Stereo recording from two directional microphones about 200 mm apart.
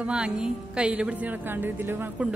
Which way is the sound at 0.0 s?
5° right (ahead or behind).